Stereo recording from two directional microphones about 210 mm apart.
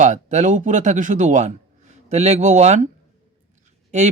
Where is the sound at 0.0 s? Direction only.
35° right (ahead or behind).